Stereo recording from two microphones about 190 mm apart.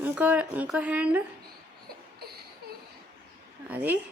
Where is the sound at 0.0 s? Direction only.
10° right (ahead or behind).